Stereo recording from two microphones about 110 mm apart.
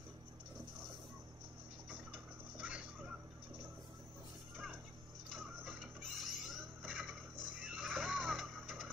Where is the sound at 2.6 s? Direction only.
10° right (ahead or behind).